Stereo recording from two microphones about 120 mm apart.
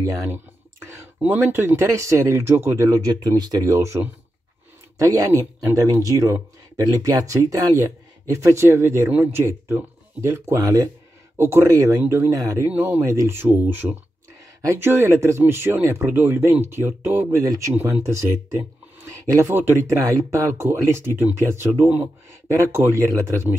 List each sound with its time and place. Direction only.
0.0 s speech: 25° right (ahead or behind)
1.2 s speech: 15° right (ahead or behind)
12.6 s speech: 15° right (ahead or behind)